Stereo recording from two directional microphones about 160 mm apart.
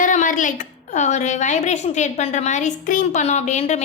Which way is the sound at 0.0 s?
50° left (ahead or behind).